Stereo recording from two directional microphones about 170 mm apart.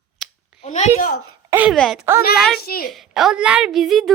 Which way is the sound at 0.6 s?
40° left (ahead or behind).